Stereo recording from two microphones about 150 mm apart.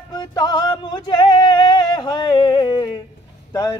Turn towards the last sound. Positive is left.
turn(degrees=25)  # may be behind; listen again after turning